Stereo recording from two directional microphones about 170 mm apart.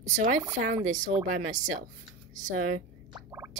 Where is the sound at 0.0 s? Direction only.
45° right (ahead or behind).